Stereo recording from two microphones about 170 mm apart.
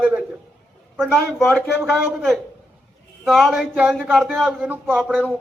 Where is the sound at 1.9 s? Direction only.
Centre (ahead or behind).